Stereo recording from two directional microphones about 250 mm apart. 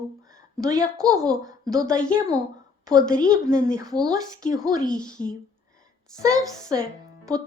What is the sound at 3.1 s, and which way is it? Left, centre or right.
Speech, centre.